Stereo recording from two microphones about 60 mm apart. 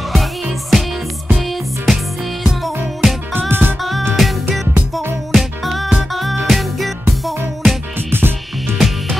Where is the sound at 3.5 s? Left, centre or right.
Right.